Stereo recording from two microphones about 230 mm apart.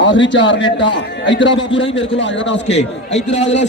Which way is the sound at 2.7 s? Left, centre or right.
Left.